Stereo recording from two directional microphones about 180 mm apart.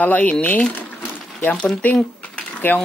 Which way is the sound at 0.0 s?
10° left (ahead or behind).